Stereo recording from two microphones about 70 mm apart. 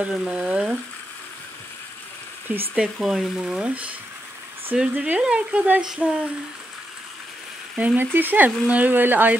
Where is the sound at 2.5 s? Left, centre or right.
Right.